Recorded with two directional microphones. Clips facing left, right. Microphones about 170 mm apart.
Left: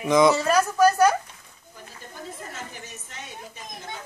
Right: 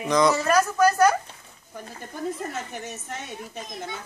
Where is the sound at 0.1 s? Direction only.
10° left (ahead or behind).